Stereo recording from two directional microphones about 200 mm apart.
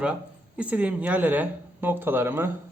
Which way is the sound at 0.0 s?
5° right (ahead or behind).